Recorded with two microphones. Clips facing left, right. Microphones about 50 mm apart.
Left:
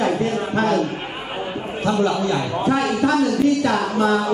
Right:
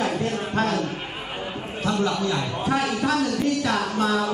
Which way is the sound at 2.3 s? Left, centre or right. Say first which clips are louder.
Left 4 dB; centre.